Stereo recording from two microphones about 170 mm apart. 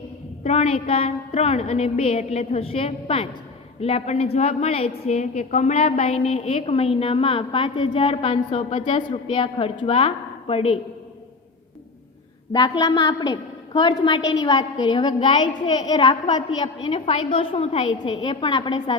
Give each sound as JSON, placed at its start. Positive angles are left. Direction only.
{"t": 0.4, "sound": "a woman's voice", "side_deg": 35}
{"t": 12.5, "sound": "a woman's voice", "side_deg": 25}